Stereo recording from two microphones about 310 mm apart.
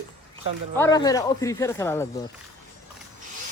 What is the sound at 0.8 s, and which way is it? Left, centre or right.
Speech, centre.